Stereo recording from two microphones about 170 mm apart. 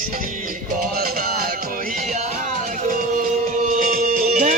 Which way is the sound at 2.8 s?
55° right (ahead or behind).